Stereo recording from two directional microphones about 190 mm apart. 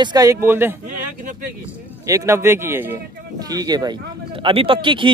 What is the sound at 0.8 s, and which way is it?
Speech, 45° right (ahead or behind).